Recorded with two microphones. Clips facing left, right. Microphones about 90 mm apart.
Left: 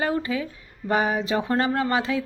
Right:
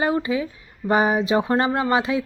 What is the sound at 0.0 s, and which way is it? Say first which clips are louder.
A woman's voice: right 3 dB; 20° right (ahead or behind).